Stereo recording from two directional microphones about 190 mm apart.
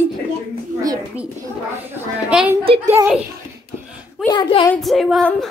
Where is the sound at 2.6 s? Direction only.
30° right (ahead or behind).